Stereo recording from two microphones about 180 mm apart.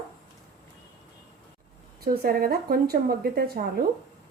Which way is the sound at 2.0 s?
55° right (ahead or behind).